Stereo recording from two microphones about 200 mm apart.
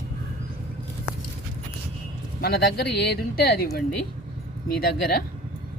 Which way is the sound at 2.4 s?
55° left (ahead or behind).